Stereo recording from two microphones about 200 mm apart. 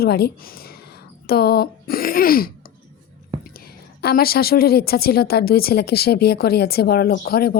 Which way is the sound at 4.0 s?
50° left (ahead or behind).